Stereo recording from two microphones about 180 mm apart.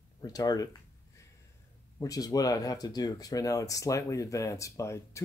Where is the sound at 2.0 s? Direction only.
20° left (ahead or behind).